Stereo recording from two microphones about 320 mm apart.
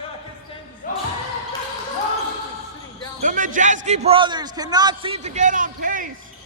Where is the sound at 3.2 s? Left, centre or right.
Right.